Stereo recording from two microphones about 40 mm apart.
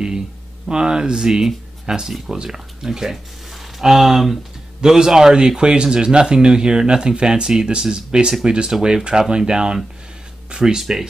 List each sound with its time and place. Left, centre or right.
0.7 s speech: right